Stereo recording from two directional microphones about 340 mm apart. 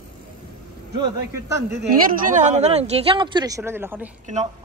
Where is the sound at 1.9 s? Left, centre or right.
Right; by 4.1 s centre.